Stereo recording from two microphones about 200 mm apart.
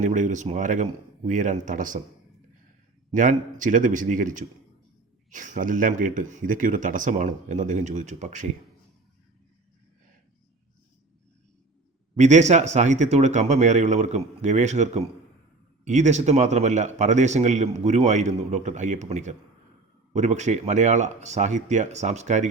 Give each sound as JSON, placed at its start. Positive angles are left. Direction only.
{"t": 0.0, "sound": "a man's voice", "side_deg": -40}
{"t": 3.1, "sound": "a man's voice", "side_deg": -40}
{"t": 12.1, "sound": "a man's voice", "side_deg": -35}